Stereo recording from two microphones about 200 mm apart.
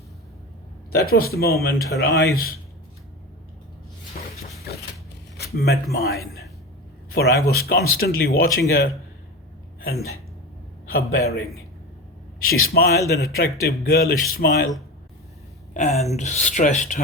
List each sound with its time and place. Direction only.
0.9 s speech: 50° left (ahead or behind)
5.5 s a man's voice: 55° left (ahead or behind)
12.4 s speech: 50° left (ahead or behind)
15.7 s a woman's voice: 35° left (ahead or behind)